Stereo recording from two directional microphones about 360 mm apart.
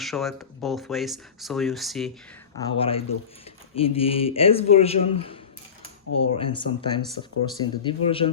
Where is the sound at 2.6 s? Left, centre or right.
Centre.